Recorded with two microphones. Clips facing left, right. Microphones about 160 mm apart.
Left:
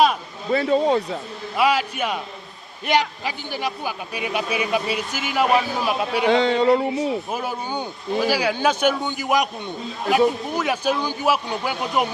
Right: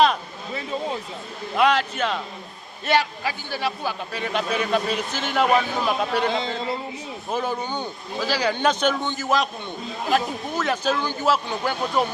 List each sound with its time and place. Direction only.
0.5 s speech: 75° left (ahead or behind)
1.5 s a man's voice: 10° left (ahead or behind)
6.2 s speech: 70° left (ahead or behind)
7.3 s a man's voice: 10° left (ahead or behind)
10.5 s a man's voice: 10° left (ahead or behind)